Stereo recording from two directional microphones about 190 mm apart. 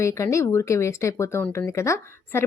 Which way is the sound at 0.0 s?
15° left (ahead or behind).